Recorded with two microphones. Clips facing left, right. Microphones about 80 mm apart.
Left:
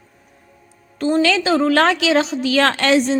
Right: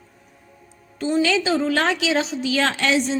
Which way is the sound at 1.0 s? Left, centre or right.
Left.